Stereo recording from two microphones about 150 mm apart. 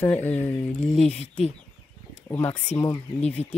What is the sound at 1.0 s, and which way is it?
Speech, 45° left (ahead or behind).